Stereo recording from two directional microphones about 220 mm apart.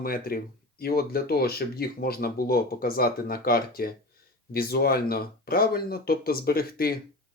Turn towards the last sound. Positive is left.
turn(degrees=40)  # may be behind; listen again after turning